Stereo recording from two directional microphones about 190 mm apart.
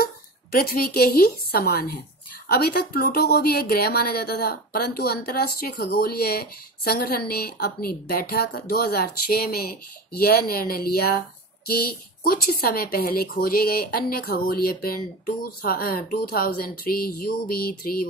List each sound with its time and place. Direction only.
0.0 s speech: 55° left (ahead or behind)